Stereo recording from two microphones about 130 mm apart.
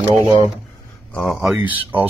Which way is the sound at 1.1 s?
Centre (ahead or behind).